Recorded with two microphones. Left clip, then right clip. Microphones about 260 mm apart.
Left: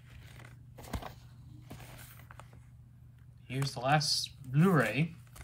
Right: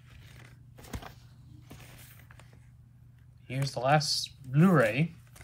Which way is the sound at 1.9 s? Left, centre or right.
Left.